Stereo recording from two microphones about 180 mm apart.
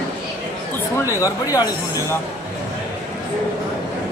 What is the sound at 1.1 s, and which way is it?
Speech, 20° left (ahead or behind).